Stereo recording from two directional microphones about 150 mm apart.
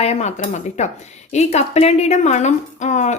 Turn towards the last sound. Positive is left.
turn(degrees=50)  # may be behind; listen again after turning